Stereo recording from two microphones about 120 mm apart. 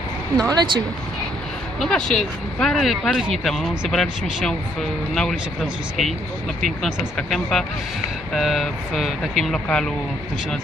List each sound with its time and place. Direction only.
0.3 s speech: 35° right (ahead or behind)
1.8 s speech: 5° left (ahead or behind)